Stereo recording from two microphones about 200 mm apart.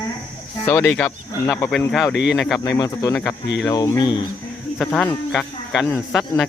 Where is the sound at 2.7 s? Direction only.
20° left (ahead or behind).